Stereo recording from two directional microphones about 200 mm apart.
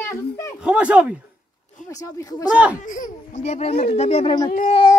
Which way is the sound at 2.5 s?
5° right (ahead or behind).